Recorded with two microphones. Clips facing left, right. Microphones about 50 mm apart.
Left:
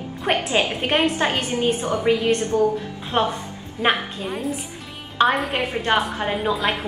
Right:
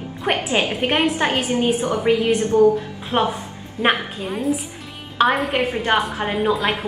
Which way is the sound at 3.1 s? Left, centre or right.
Centre.